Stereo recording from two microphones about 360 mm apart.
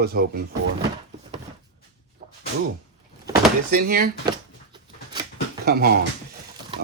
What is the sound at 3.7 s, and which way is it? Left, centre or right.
Speech, right.